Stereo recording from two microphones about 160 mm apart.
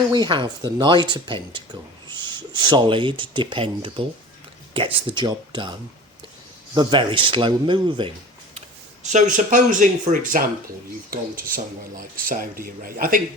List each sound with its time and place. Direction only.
0.1 s speech: 30° right (ahead or behind)
6.7 s speech: 30° right (ahead or behind)
9.1 s speech: 50° right (ahead or behind)
11.1 s speech: 65° right (ahead or behind)